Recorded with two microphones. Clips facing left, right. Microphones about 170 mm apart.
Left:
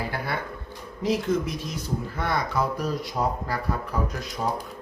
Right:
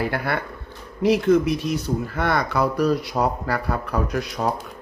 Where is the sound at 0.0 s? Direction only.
65° right (ahead or behind).